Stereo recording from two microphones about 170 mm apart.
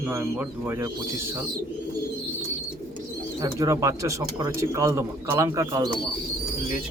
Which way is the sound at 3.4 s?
20° right (ahead or behind).